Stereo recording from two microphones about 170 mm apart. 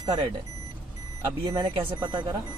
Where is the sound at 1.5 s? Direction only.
25° right (ahead or behind).